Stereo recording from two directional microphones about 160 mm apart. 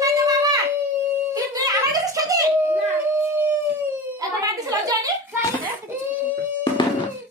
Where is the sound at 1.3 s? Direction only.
20° right (ahead or behind).